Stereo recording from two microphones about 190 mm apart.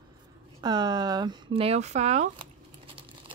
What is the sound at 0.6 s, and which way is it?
Speech, 20° right (ahead or behind).